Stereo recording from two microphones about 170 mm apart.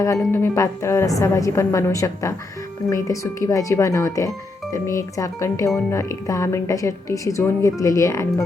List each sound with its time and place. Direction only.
0.0 s a woman's voice: 15° left (ahead or behind)